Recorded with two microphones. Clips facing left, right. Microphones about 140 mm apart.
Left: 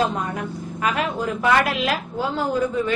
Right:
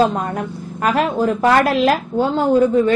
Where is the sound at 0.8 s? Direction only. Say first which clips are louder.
Right 7 dB; 40° right (ahead or behind).